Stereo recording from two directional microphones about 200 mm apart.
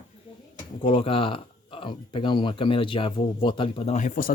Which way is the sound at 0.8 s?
25° left (ahead or behind).